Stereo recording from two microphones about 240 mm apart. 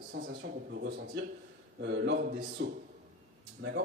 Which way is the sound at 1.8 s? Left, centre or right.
Right.